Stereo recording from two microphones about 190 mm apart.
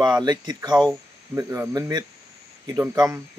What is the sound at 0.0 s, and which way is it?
Speech, 20° right (ahead or behind).